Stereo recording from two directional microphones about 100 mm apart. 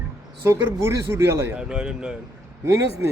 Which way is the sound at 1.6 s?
10° right (ahead or behind).